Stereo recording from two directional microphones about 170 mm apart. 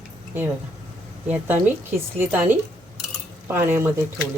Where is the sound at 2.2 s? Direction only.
10° right (ahead or behind).